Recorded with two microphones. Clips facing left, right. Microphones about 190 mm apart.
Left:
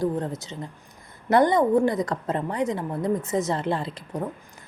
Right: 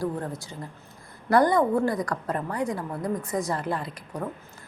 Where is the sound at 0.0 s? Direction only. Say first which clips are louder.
Left 4 dB; 20° left (ahead or behind).